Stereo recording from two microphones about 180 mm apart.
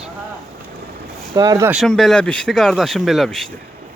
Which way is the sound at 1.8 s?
Centre (ahead or behind).